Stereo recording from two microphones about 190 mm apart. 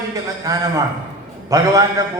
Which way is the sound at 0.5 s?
20° right (ahead or behind).